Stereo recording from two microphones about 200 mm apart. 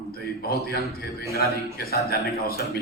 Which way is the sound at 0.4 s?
50° left (ahead or behind).